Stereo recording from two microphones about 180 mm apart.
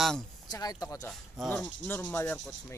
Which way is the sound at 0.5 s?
20° left (ahead or behind).